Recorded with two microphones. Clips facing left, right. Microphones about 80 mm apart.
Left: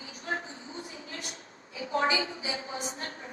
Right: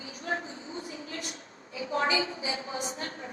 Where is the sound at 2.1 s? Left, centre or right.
Right.